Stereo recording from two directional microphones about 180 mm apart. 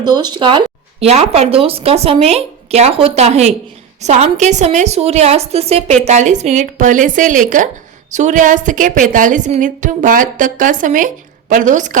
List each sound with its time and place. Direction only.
0.0 s a woman's voice: 25° right (ahead or behind); by 11.9 s 45° right (ahead or behind)